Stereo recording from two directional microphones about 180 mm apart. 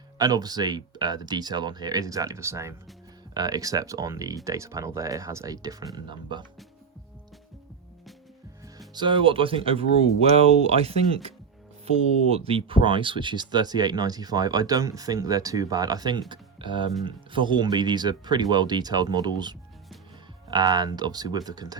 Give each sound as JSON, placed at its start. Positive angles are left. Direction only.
{"t": 0.2, "sound": "speech", "side_deg": -20}
{"t": 9.0, "sound": "speech", "side_deg": -25}
{"t": 12.5, "sound": "speech", "side_deg": -30}
{"t": 16.3, "sound": "music", "side_deg": -25}
{"t": 17.0, "sound": "speech", "side_deg": -25}